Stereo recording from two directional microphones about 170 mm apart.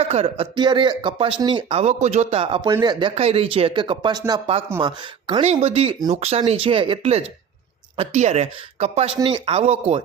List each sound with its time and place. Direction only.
0.0 s speech: 35° right (ahead or behind)
3.2 s speech: 35° right (ahead or behind)